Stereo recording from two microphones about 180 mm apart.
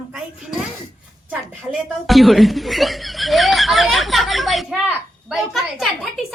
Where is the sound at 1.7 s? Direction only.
Centre (ahead or behind).